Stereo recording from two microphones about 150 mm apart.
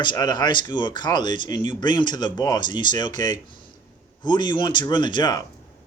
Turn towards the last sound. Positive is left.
turn(degrees=30)  # may be behind; listen again after turning